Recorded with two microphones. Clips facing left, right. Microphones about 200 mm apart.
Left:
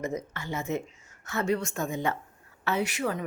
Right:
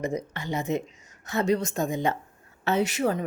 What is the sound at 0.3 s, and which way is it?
A woman's voice, 15° right (ahead or behind).